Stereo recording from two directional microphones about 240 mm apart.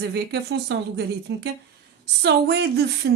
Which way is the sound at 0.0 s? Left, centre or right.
Right.